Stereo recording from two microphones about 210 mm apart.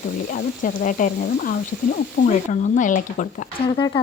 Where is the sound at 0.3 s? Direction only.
40° left (ahead or behind).